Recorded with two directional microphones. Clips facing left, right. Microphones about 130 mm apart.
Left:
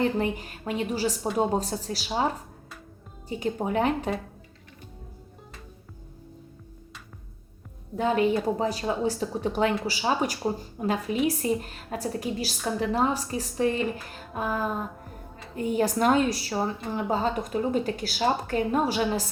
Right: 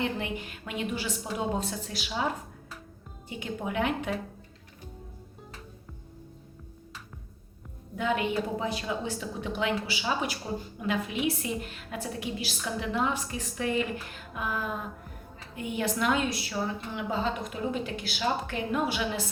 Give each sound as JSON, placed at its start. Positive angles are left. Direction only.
{"t": 0.0, "sound": "a woman's voice", "side_deg": 40}
{"t": 7.9, "sound": "a woman's voice", "side_deg": 35}